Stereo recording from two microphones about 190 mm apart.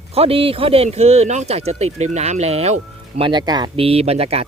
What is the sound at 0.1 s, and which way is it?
Speech, 30° right (ahead or behind).